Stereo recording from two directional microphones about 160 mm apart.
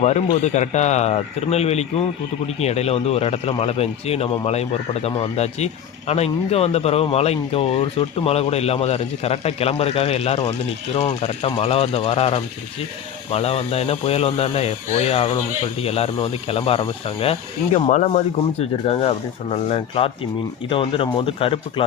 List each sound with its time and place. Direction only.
0.0 s speech: 45° left (ahead or behind)